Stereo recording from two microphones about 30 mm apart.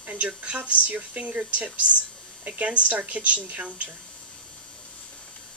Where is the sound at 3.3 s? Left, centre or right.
Right.